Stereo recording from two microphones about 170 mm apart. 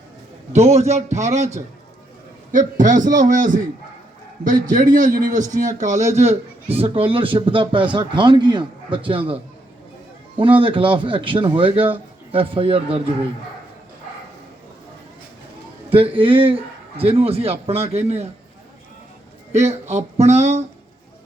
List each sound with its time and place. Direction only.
0.5 s a man's voice: 40° right (ahead or behind)
15.9 s a man's voice: 30° right (ahead or behind)
19.5 s a man's voice: 40° right (ahead or behind)